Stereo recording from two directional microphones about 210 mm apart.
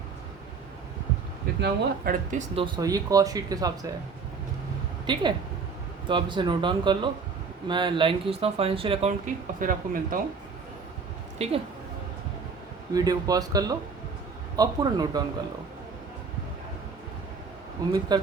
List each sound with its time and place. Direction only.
1.6 s speech: 45° right (ahead or behind)
2.6 s speech: 20° right (ahead or behind)
5.1 s speech: 20° right (ahead or behind); by 10.2 s 40° right (ahead or behind)
11.4 s a woman's voice: 30° right (ahead or behind)
12.9 s speech: 15° right (ahead or behind)
17.8 s speech: 15° right (ahead or behind)